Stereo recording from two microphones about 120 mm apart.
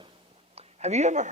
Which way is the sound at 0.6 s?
65° right (ahead or behind).